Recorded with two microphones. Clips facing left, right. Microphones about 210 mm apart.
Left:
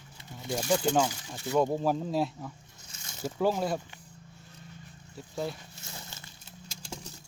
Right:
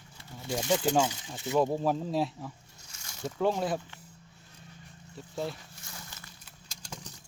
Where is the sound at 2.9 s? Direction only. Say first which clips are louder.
Left 2 dB; 25° left (ahead or behind).